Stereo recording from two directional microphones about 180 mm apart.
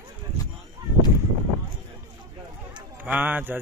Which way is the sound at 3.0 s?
10° right (ahead or behind).